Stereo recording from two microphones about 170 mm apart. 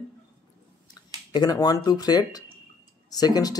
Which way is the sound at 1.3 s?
25° left (ahead or behind).